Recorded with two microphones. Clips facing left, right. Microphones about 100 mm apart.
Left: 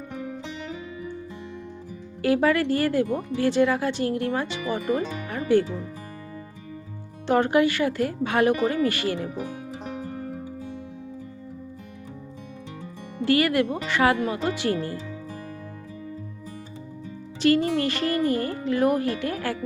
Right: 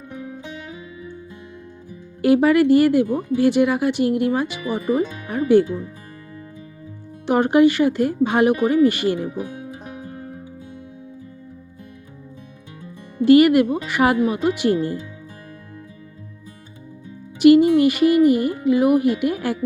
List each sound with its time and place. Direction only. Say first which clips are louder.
2.2 s speech: right 6 dB; 15° right (ahead or behind)
7.3 s speech: right 5 dB; 15° right (ahead or behind)
13.2 s speech: right 9 dB; 20° right (ahead or behind)
17.4 s speech: right 9 dB; 15° right (ahead or behind)